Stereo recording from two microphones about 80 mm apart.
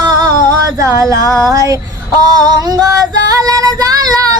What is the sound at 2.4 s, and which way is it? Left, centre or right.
Music, right.